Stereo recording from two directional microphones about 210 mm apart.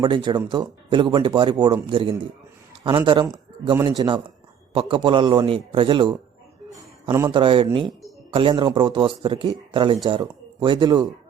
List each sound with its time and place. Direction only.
0.0 s speech: 20° right (ahead or behind)